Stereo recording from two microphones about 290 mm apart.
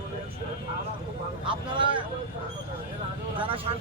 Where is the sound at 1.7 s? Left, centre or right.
Centre.